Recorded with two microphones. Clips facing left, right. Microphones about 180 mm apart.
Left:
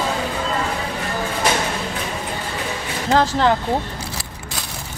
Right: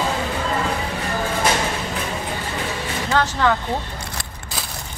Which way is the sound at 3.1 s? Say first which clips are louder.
Left 3 dB; 30° left (ahead or behind).